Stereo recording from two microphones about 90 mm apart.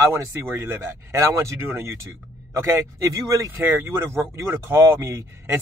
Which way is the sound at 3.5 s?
25° right (ahead or behind).